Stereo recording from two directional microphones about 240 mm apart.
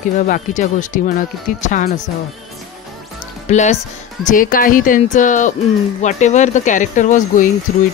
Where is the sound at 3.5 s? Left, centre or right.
Left.